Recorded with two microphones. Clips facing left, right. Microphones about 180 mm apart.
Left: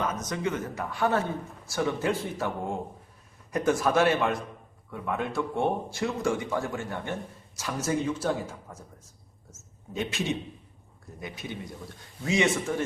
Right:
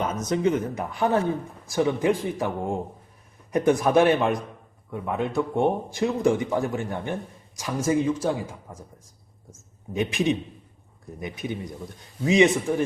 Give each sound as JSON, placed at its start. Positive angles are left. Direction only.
{"t": 0.0, "sound": "speech", "side_deg": -20}
{"t": 9.9, "sound": "speech", "side_deg": -15}